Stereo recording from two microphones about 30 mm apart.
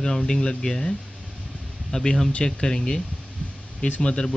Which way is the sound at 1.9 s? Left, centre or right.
Left.